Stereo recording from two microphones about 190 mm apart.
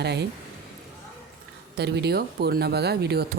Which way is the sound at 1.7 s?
60° right (ahead or behind).